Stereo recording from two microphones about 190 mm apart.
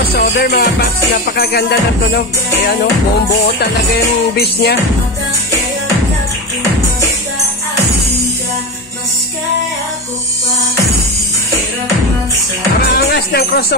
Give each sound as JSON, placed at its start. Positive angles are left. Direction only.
{"t": 0.1, "sound": "music", "side_deg": 55}
{"t": 12.9, "sound": "music", "side_deg": 55}